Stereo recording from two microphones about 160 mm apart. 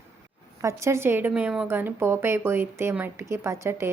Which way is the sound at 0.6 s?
20° right (ahead or behind).